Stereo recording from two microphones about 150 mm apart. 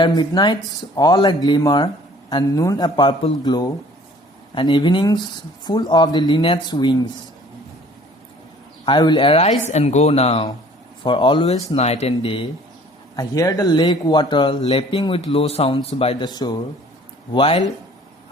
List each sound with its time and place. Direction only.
0.0 s speech: 30° left (ahead or behind)
8.9 s speech: 30° left (ahead or behind)
13.1 s speech: 25° left (ahead or behind); by 16.1 s 40° left (ahead or behind)
16.2 s speech: 25° left (ahead or behind)